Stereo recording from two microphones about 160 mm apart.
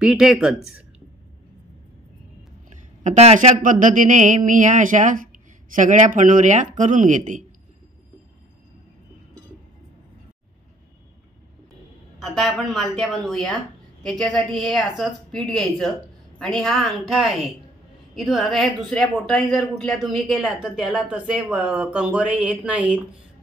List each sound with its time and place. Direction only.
0.0 s speech: 5° right (ahead or behind)
2.7 s speech: 50° right (ahead or behind)
12.2 s speech: 5° left (ahead or behind)